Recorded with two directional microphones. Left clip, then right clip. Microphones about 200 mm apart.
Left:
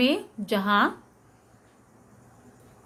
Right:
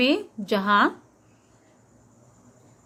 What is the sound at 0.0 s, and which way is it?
Speech, 20° right (ahead or behind).